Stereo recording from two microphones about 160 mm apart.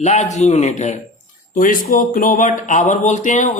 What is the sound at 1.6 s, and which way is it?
A man's voice, 55° left (ahead or behind).